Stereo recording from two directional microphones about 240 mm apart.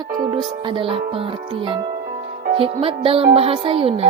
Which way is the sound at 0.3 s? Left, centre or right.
Centre.